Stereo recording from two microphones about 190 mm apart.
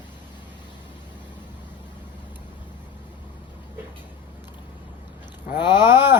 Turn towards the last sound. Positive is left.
turn(degrees=25)  # may be behind; listen again after turning